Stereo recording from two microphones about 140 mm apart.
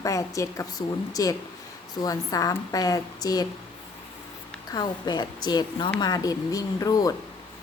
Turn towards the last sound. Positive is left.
turn(degrees=25)  # may be behind; listen again after turning